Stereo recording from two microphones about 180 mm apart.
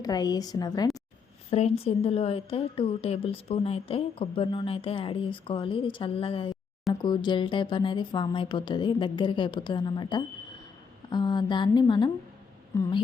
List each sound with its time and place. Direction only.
0.0 s a woman's voice: 20° left (ahead or behind)
1.5 s a woman's voice: 35° left (ahead or behind); by 12.9 s 15° left (ahead or behind)